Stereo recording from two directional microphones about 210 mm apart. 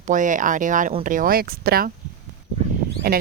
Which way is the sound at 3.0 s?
45° right (ahead or behind).